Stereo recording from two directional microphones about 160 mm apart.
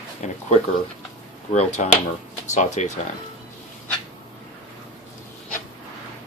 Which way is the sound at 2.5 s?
45° left (ahead or behind).